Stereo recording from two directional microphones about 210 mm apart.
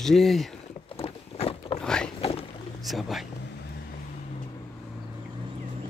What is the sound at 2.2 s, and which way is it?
Boat, 30° left (ahead or behind).